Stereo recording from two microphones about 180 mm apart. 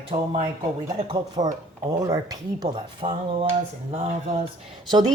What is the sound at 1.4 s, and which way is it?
Speech, 25° right (ahead or behind).